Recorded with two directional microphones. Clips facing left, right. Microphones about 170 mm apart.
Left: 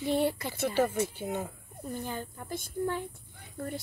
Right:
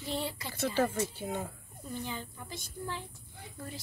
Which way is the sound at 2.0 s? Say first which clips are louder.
Left 3 dB; 50° left (ahead or behind).